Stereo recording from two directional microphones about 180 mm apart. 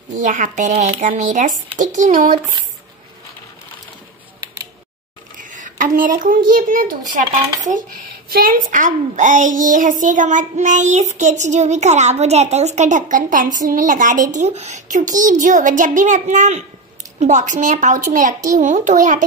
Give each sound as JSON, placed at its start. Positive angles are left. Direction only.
{"t": 0.1, "sound": "a woman's voice", "side_deg": -45}
{"t": 5.4, "sound": "a sound", "side_deg": -45}
{"t": 6.5, "sound": "a woman's voice", "side_deg": -50}